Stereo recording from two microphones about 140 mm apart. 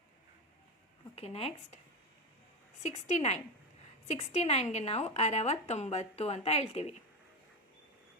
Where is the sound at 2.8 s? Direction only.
55° left (ahead or behind).